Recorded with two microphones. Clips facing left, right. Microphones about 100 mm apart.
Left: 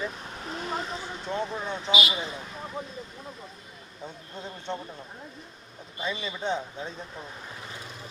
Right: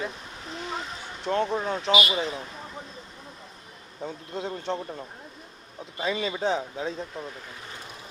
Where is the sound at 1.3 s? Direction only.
90° right.